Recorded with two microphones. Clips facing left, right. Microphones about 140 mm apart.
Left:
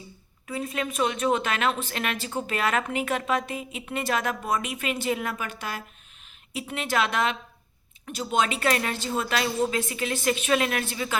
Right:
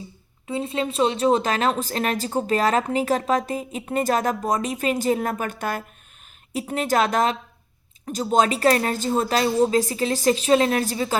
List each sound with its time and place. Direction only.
0.4 s a woman's voice: 25° right (ahead or behind)